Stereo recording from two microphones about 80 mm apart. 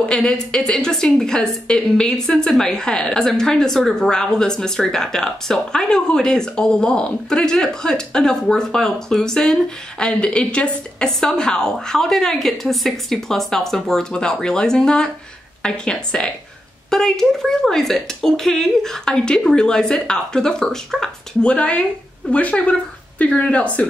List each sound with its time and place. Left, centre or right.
0.1 s a woman's voice: centre